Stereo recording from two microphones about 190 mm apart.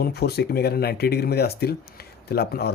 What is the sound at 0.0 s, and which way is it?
Speech, 55° left (ahead or behind).